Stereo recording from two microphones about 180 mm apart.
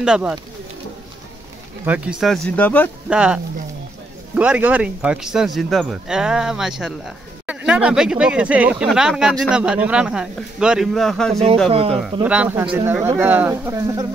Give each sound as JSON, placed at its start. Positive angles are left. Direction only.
{"t": 0.0, "sound": "speech", "side_deg": -5}
{"t": 1.9, "sound": "speech", "side_deg": -5}
{"t": 3.1, "sound": "speech", "side_deg": -5}
{"t": 4.4, "sound": "speech", "side_deg": -10}
{"t": 11.7, "sound": "speech", "side_deg": -30}
{"t": 12.0, "sound": "speech", "side_deg": -5}